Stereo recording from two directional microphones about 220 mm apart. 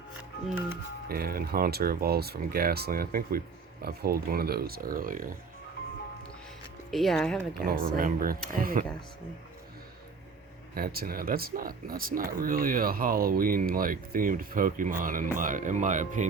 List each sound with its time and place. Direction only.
1.0 s speech: 45° right (ahead or behind)
6.9 s speech: centre (ahead or behind)
7.6 s speech: 40° right (ahead or behind)
10.8 s speech: 40° right (ahead or behind)